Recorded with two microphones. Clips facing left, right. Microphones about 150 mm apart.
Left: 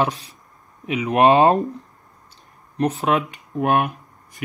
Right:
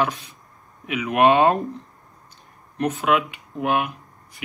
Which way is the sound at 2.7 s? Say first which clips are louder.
Left 1 dB; 35° left (ahead or behind).